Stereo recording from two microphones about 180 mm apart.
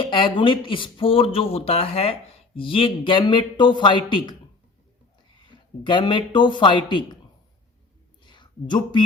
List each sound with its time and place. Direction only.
0.0 s speech: 25° left (ahead or behind)
5.5 s speech: 25° left (ahead or behind)
8.2 s a sound: 25° left (ahead or behind)